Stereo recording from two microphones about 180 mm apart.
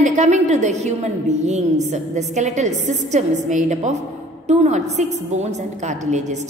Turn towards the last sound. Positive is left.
turn(degrees=-40)  # may be behind; listen again after turning